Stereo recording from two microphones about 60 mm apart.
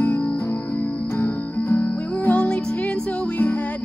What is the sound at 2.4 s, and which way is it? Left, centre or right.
Music, centre.